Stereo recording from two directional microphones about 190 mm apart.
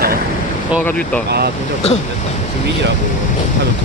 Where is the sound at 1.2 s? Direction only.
60° right (ahead or behind).